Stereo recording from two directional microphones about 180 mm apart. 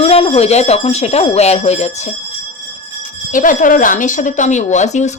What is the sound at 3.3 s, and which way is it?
Speech, 45° left (ahead or behind).